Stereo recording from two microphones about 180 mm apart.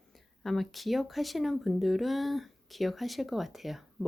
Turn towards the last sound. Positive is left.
turn(degrees=0)  # may be behind; listen again after turning